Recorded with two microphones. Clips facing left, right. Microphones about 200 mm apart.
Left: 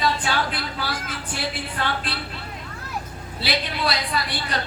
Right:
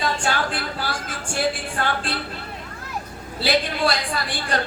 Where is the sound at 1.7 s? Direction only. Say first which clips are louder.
Right 2 dB; 50° right (ahead or behind).